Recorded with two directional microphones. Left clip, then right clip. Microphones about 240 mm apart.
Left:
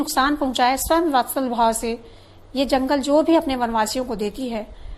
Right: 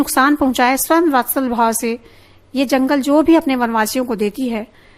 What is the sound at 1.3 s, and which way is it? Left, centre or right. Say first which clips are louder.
Speech: right 3 dB; right.